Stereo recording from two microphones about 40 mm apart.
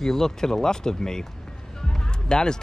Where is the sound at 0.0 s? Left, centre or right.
Centre.